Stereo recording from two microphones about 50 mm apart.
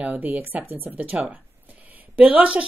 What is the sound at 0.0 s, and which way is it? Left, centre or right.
Speech, right.